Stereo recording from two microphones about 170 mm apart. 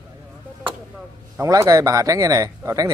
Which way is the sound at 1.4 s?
20° right (ahead or behind).